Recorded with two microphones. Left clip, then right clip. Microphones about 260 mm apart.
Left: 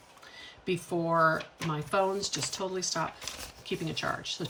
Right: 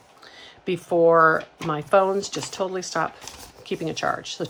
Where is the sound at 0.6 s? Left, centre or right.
Centre.